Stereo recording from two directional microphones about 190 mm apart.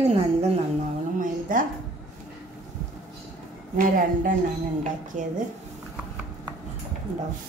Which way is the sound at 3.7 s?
45° right (ahead or behind).